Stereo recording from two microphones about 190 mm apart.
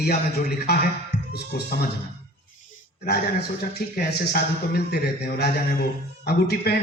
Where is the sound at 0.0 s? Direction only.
60° left (ahead or behind).